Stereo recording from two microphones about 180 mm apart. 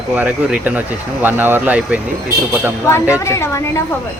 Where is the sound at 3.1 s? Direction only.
15° left (ahead or behind).